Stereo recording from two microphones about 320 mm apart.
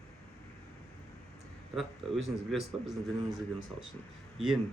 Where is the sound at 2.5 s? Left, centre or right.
Centre.